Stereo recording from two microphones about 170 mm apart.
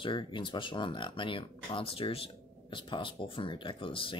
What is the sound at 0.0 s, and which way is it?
Speech, 30° left (ahead or behind).